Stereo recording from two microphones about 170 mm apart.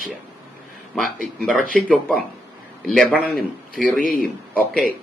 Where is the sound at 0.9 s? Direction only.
5° left (ahead or behind).